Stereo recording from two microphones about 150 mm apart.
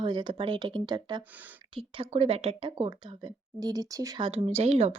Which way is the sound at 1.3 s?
10° right (ahead or behind).